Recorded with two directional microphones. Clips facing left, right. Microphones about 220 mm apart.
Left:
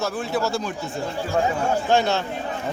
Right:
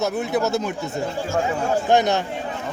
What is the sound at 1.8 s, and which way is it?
Speech, 15° right (ahead or behind).